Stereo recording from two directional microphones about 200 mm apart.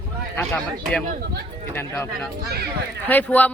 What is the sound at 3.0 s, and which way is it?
Speech, 10° left (ahead or behind).